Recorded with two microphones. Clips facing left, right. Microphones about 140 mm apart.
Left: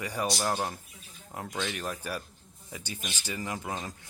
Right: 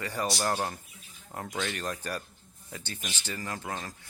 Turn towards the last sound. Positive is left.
turn(degrees=15)  # may be behind; listen again after turning